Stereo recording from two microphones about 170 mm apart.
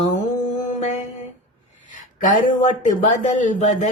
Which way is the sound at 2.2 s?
50° left (ahead or behind).